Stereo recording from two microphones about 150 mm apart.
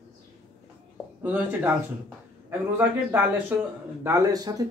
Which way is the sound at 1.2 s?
10° right (ahead or behind).